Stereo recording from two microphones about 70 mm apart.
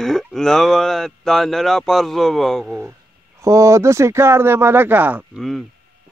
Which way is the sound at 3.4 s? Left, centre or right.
Right.